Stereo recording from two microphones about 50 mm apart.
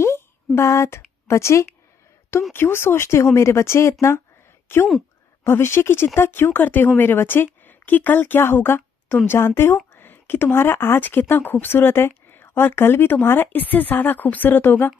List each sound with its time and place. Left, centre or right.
0.0 s a sound: left
2.5 s speech: left
4.7 s speech: left
9.5 s speech: left
9.9 s speech: left